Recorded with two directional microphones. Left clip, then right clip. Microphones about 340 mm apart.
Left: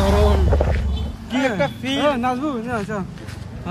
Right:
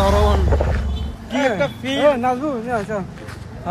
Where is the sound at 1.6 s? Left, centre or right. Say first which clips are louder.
Right 3 dB; centre.